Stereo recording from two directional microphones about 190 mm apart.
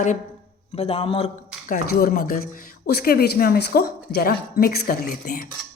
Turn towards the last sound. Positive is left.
turn(degrees=50)  # may be behind; listen again after turning